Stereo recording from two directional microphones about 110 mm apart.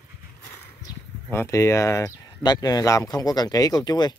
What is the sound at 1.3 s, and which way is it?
Speech, 25° left (ahead or behind).